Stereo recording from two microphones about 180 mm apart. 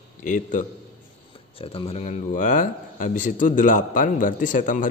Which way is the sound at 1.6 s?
30° left (ahead or behind).